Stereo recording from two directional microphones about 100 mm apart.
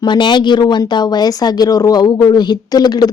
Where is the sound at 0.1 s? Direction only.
50° left (ahead or behind).